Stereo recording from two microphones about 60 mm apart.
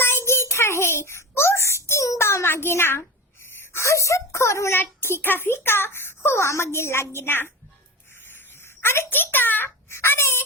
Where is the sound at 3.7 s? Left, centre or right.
Left.